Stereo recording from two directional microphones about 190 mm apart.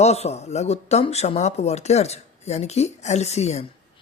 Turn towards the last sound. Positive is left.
turn(degrees=35)  # may be behind; listen again after turning